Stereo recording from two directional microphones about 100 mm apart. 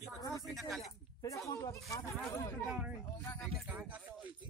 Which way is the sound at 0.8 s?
35° left (ahead or behind).